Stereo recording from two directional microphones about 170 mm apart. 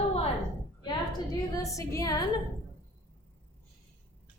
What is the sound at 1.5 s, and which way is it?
Speech, 20° left (ahead or behind).